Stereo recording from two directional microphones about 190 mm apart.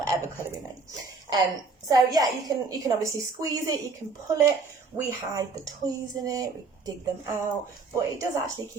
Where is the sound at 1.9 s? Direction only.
20° right (ahead or behind).